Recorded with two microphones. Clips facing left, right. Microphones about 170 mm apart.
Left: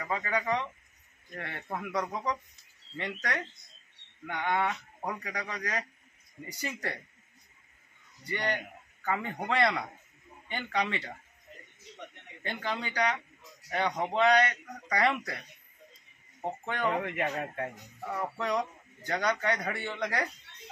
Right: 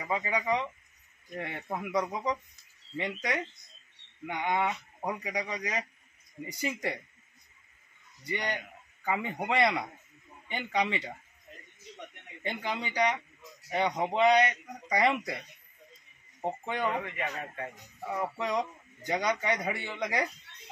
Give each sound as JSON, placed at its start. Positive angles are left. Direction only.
{"t": 0.0, "sound": "speech", "side_deg": -15}
{"t": 8.3, "sound": "speech", "side_deg": -15}
{"t": 12.4, "sound": "speech", "side_deg": -15}
{"t": 17.0, "sound": "speech", "side_deg": 50}
{"t": 18.0, "sound": "speech", "side_deg": -10}